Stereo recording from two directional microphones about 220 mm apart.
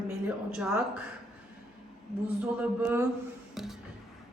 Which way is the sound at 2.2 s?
5° right (ahead or behind).